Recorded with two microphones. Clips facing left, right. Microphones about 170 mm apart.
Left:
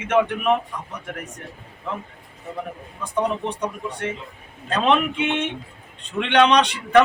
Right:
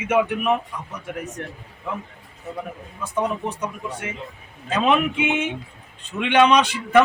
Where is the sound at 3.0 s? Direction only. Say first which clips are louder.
Right 1 dB; 5° right (ahead or behind).